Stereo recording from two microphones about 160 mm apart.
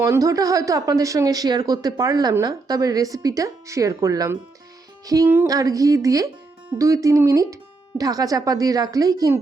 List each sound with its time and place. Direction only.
0.0 s speech: 20° right (ahead or behind)